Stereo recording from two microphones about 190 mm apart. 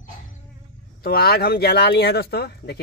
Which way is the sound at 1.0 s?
55° left (ahead or behind).